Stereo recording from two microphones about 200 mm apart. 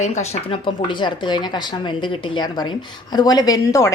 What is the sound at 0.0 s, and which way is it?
A woman's voice, 35° left (ahead or behind).